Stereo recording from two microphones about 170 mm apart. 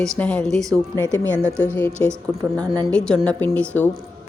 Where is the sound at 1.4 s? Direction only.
15° right (ahead or behind).